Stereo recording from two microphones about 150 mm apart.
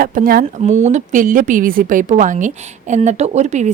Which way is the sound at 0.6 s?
50° right (ahead or behind).